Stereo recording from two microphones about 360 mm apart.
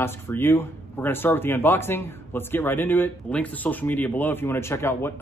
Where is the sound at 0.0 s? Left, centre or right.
Centre.